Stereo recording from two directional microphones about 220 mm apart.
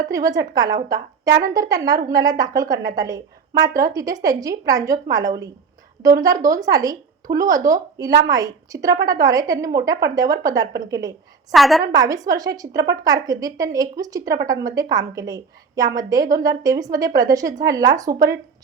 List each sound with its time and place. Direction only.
0.0 s a woman's voice: 15° right (ahead or behind)
11.5 s a woman's voice: centre (ahead or behind)
11.9 s speech: 15° right (ahead or behind)